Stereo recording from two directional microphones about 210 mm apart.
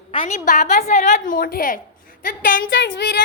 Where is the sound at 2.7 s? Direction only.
60° left (ahead or behind).